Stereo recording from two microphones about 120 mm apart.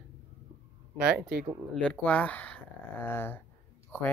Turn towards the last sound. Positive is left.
turn(degrees=15)  # may be behind; listen again after turning